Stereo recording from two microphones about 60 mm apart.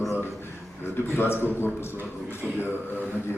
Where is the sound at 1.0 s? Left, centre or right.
Left.